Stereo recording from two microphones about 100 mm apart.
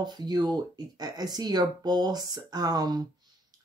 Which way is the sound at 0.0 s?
45° right (ahead or behind).